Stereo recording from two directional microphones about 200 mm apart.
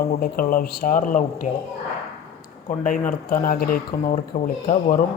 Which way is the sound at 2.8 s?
40° left (ahead or behind).